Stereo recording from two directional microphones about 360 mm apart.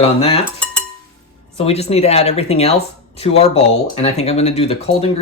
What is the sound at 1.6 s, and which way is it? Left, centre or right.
Speech, centre.